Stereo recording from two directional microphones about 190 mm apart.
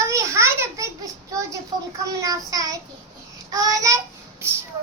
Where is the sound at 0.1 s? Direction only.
15° right (ahead or behind).